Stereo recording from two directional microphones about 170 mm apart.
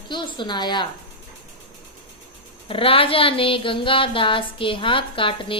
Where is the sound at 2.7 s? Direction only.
35° left (ahead or behind).